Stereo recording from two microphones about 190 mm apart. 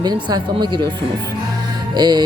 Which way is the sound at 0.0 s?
20° right (ahead or behind).